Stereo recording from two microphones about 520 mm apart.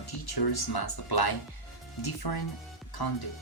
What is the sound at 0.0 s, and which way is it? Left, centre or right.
Speech, left.